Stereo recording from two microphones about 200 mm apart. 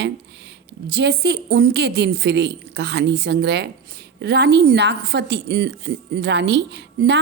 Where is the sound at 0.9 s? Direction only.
55° right (ahead or behind).